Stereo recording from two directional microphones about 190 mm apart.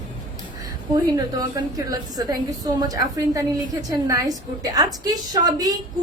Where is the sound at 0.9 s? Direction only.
20° right (ahead or behind).